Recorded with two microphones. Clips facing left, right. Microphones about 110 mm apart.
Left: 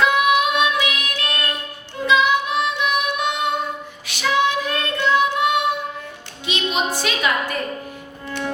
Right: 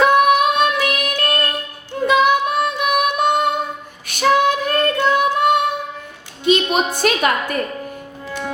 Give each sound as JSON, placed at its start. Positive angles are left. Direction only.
{"t": 0.0, "sound": "child singing", "side_deg": -45}
{"t": 2.0, "sound": "music", "side_deg": -50}
{"t": 4.0, "sound": "child singing", "side_deg": -50}
{"t": 6.4, "sound": "a sound", "side_deg": -50}
{"t": 7.0, "sound": "a woman's voice", "side_deg": -50}